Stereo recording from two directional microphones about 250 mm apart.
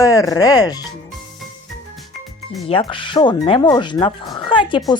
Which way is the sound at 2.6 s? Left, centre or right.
Left.